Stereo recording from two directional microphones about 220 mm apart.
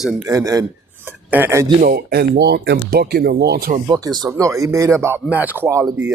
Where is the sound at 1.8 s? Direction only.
45° right (ahead or behind).